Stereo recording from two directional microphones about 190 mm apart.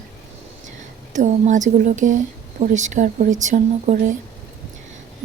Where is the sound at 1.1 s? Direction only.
40° right (ahead or behind).